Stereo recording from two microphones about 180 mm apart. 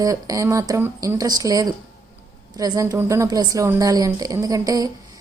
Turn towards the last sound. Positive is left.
turn(degrees=-20)  # may be behind; listen again after turning